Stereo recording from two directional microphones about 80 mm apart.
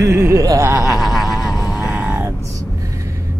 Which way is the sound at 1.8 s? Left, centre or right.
Centre.